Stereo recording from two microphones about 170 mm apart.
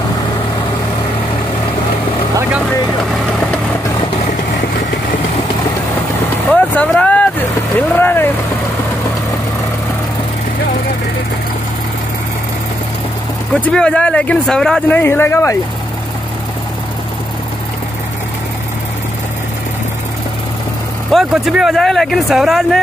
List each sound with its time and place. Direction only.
6.5 s vehicle: 10° left (ahead or behind)
13.7 s speech: 5° left (ahead or behind)
21.1 s speech: centre (ahead or behind)